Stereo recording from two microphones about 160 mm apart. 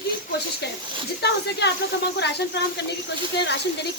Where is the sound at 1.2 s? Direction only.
90° left.